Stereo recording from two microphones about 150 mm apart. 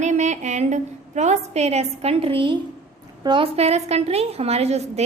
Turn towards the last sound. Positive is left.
turn(degrees=-45)  # may be behind; listen again after turning